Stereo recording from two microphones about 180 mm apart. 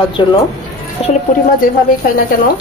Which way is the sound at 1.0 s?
35° left (ahead or behind).